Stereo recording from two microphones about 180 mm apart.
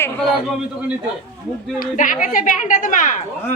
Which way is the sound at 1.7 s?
45° left (ahead or behind).